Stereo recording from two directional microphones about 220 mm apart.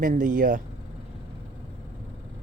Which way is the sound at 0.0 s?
35° right (ahead or behind).